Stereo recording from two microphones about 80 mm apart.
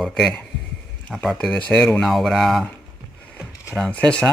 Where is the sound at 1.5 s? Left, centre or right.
Centre.